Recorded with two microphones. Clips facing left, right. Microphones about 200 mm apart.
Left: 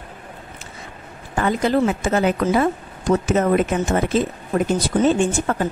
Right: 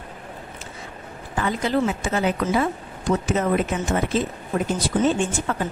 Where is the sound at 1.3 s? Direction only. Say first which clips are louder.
Left 4 dB; 50° left (ahead or behind).